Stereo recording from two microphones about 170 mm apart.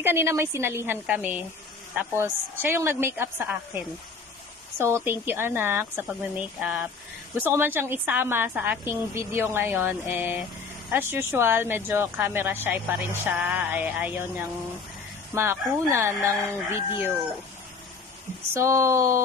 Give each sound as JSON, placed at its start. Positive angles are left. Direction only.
{"t": 0.0, "sound": "a woman's voice", "side_deg": -15}
{"t": 18.5, "sound": "a woman's voice", "side_deg": -15}